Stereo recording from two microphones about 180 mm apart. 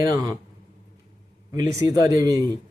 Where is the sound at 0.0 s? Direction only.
20° right (ahead or behind).